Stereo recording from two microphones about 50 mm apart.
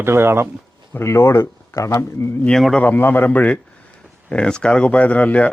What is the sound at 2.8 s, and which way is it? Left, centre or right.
Speech, left.